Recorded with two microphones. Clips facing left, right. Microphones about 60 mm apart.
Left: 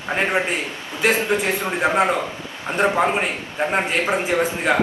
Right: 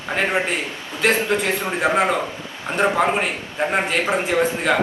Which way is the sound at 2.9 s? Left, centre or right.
Centre.